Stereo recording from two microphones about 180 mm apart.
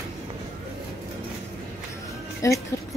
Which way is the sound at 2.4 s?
15° left (ahead or behind).